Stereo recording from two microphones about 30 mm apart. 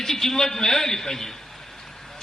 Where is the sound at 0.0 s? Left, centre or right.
Centre.